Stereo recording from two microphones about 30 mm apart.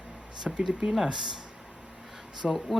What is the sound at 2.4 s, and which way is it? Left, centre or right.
Speech, right.